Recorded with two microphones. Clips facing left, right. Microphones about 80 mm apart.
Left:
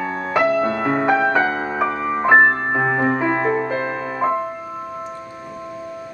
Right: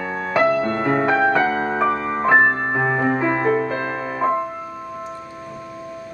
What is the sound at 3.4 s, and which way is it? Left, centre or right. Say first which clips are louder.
Music: even; left.